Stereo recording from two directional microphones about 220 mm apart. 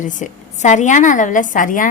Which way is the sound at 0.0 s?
35° left (ahead or behind).